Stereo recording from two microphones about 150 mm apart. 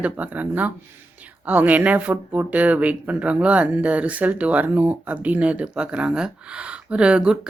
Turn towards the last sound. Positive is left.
turn(degrees=-5)  # may be behind; listen again after turning